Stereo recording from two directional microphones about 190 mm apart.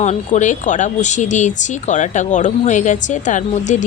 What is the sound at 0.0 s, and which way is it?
Speech, 40° left (ahead or behind).